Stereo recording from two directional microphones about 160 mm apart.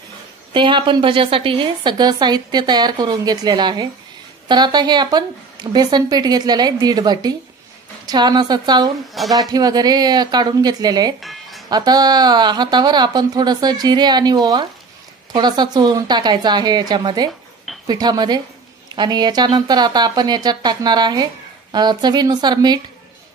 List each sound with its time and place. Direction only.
0.5 s a woman's voice: 30° right (ahead or behind)
9.2 s speech: centre (ahead or behind)
9.5 s a woman's voice: 25° right (ahead or behind)
11.1 s music: centre (ahead or behind)
11.7 s a woman's voice: 25° right (ahead or behind)